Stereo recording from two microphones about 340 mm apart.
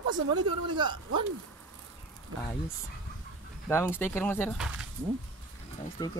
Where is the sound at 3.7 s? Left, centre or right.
Centre.